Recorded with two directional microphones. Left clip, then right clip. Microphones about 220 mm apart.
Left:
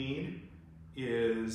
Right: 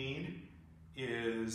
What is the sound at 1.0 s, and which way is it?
Speech, 30° right (ahead or behind).